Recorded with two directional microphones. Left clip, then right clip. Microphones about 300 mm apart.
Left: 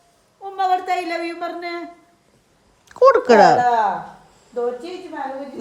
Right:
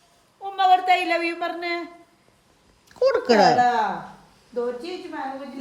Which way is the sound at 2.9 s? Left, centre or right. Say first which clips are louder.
Left 8 dB; right.